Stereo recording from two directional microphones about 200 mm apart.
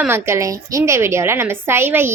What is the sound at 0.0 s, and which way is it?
A woman's voice, 15° right (ahead or behind).